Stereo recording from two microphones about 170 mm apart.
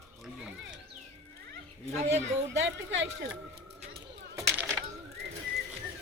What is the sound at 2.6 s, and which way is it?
Speech, 90° right.